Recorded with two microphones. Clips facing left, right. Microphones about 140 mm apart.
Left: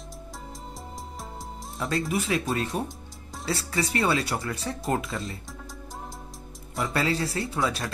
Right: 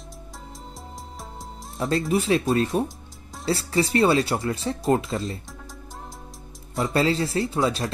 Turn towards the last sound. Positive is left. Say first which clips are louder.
# right 4 dB
turn(degrees=-25)  # may be behind; listen again after turning